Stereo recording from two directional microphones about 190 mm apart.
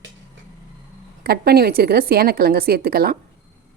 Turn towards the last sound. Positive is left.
turn(degrees=-55)  # may be behind; listen again after turning